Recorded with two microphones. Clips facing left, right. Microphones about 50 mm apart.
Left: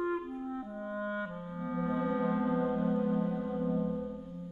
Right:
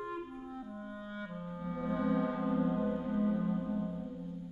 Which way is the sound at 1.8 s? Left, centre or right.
Centre.